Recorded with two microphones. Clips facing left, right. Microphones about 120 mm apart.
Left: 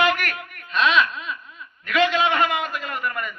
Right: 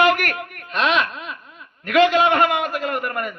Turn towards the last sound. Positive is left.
turn(degrees=-50)  # may be behind; listen again after turning